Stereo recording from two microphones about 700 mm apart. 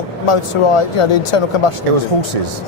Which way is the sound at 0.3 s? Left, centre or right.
Left.